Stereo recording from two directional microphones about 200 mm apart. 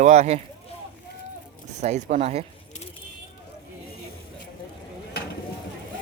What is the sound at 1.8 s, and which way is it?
Speech, 35° right (ahead or behind).